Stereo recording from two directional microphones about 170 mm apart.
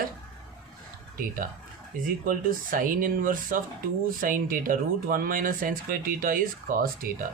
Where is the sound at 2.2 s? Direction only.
55° right (ahead or behind).